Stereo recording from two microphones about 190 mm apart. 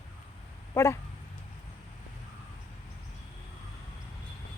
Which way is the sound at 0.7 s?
15° left (ahead or behind).